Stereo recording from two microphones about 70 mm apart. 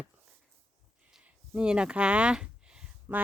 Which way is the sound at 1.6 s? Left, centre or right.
Centre.